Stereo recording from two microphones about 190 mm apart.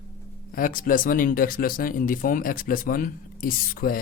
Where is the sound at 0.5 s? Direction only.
45° left (ahead or behind).